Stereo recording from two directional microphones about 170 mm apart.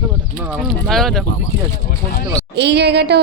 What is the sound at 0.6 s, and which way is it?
Speech, 5° left (ahead or behind).